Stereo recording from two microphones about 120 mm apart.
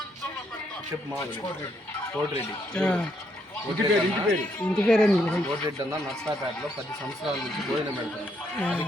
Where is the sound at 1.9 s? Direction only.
10° left (ahead or behind).